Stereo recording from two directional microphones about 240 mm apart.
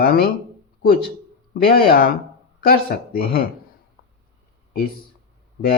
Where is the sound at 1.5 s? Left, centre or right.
Left.